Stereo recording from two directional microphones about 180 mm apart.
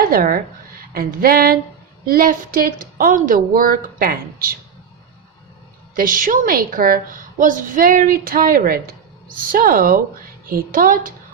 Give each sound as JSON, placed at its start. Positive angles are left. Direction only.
{"t": 0.0, "sound": "a woman's voice", "side_deg": -55}
{"t": 0.9, "sound": "a sound", "side_deg": -55}
{"t": 2.0, "sound": "a woman's voice", "side_deg": -50}
{"t": 5.9, "sound": "a woman's voice", "side_deg": -50}